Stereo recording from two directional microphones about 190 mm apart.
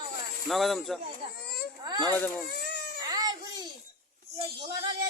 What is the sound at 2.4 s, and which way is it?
Baby cry, 55° left (ahead or behind).